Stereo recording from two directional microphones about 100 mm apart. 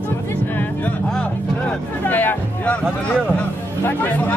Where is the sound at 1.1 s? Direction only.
5° left (ahead or behind).